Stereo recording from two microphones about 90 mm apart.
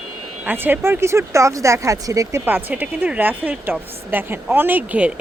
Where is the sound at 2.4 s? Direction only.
20° right (ahead or behind).